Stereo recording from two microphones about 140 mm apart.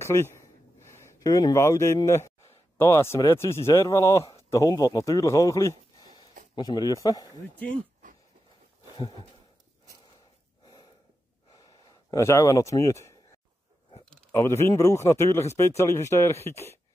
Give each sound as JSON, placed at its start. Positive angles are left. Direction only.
{"t": 0.0, "sound": "a man's voice", "side_deg": 20}
{"t": 7.5, "sound": "speech", "side_deg": 10}
{"t": 8.9, "sound": "a sound", "side_deg": 35}
{"t": 10.6, "sound": "gasp", "side_deg": 30}
{"t": 11.5, "sound": "a sound", "side_deg": 25}
{"t": 14.3, "sound": "a man's voice", "side_deg": 20}